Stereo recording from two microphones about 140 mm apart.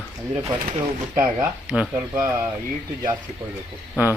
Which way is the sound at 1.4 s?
10° right (ahead or behind).